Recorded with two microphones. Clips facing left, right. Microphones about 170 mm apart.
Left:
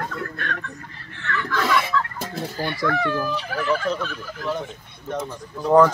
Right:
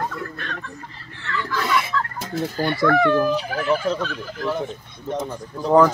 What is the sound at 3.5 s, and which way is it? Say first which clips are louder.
Speech: right 2 dB; 10° right (ahead or behind).